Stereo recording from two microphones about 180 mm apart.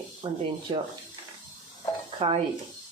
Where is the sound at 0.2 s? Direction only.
25° right (ahead or behind).